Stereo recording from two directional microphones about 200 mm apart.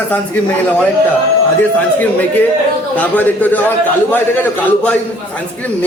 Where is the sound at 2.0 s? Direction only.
10° left (ahead or behind).